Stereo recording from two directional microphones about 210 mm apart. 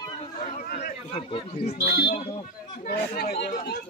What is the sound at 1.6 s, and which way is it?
Speech, 45° left (ahead or behind).